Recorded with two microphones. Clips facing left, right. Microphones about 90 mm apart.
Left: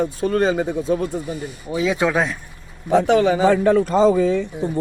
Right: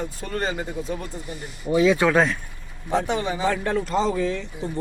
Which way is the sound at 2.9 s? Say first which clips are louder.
Left 9 dB; 75° left (ahead or behind).